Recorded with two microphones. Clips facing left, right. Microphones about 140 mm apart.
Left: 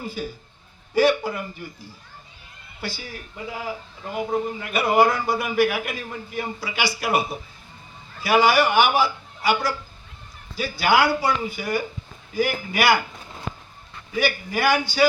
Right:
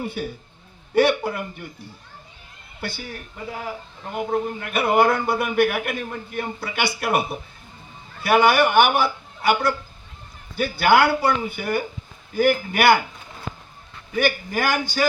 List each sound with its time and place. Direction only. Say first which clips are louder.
0.0 s a man's voice: right 2 dB; 65° right (ahead or behind)
4.3 s a man's voice: right 2 dB; 55° right (ahead or behind)
14.2 s a man's voice: right 1 dB; 50° right (ahead or behind)